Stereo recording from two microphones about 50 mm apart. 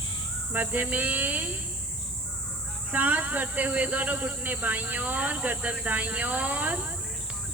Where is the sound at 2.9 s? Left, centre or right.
Right.